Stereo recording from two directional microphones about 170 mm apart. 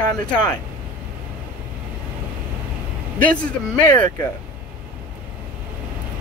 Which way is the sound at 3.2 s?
5° left (ahead or behind).